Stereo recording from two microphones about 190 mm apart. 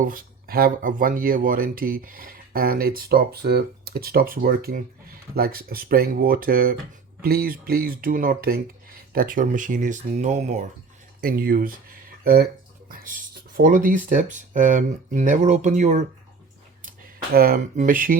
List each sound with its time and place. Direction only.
0.0 s speech: 50° right (ahead or behind)
11.2 s speech: 50° right (ahead or behind)
17.3 s speech: 50° right (ahead or behind)